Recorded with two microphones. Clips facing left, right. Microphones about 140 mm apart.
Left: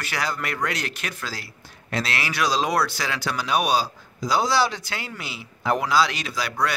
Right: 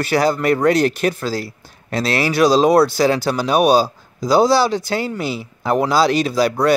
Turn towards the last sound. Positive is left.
turn(degrees=-35)  # may be behind; listen again after turning